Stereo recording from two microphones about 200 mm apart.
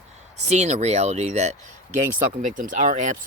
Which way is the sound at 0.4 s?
35° right (ahead or behind).